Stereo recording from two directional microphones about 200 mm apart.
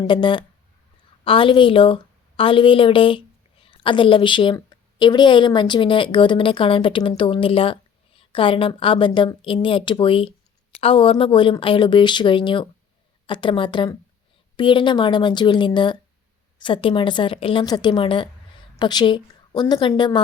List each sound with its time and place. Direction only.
0.0 s a woman's voice: 25° left (ahead or behind)